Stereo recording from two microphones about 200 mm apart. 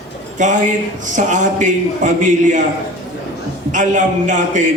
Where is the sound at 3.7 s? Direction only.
40° right (ahead or behind).